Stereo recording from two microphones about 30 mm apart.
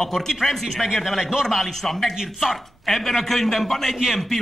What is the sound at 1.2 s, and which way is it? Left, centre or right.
Speech, centre.